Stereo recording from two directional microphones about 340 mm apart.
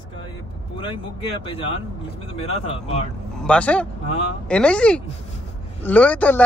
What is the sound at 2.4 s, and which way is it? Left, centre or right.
Speech, centre.